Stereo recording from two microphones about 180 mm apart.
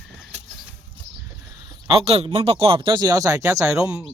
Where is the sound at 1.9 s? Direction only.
35° right (ahead or behind); by 3.7 s 15° right (ahead or behind).